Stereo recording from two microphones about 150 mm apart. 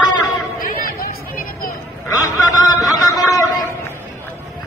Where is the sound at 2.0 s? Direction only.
25° left (ahead or behind).